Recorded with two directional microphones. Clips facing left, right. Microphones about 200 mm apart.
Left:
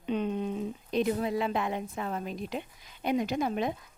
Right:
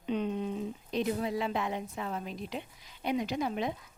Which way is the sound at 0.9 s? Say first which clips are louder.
Left 3 dB; 55° left (ahead or behind).